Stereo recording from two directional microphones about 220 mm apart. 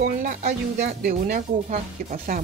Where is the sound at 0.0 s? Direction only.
40° right (ahead or behind).